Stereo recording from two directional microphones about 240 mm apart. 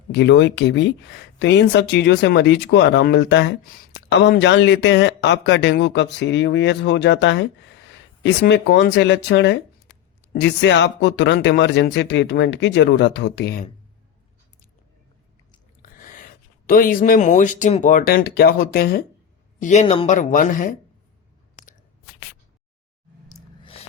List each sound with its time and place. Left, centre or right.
0.1 s speech: left
15.8 s speech: left
23.3 s a sound: left